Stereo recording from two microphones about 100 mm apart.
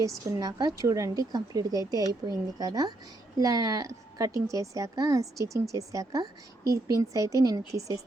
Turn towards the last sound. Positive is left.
turn(degrees=-35)  # may be behind; listen again after turning